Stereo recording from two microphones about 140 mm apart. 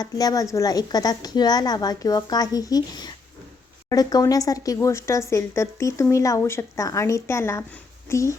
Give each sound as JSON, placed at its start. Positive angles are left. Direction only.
{"t": 0.0, "sound": "speech", "side_deg": 25}